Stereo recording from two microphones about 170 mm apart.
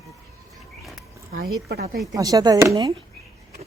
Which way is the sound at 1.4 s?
70° right (ahead or behind).